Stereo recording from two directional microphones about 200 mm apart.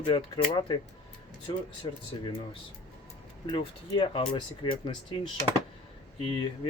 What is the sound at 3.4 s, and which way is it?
Speech, 25° left (ahead or behind).